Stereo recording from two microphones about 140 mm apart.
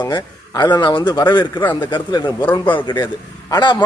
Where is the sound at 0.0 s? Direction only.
25° left (ahead or behind).